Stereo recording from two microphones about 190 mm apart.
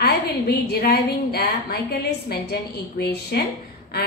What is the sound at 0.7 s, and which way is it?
A woman's voice, 55° left (ahead or behind).